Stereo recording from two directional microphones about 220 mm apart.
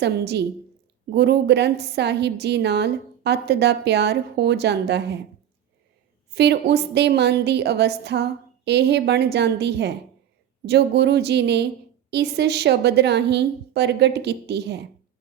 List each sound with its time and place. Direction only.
0.0 s a woman's voice: 50° right (ahead or behind)
6.3 s a woman's voice: 50° right (ahead or behind)